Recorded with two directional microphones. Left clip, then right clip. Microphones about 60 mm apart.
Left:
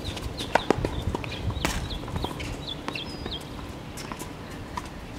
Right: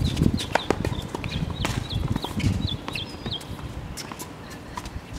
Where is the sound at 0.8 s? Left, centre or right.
Right.